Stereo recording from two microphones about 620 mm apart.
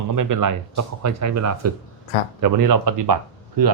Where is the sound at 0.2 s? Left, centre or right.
Right.